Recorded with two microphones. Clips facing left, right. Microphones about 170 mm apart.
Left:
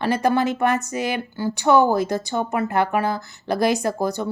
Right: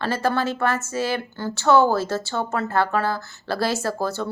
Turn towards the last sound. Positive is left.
turn(degrees=15)  # may be behind; listen again after turning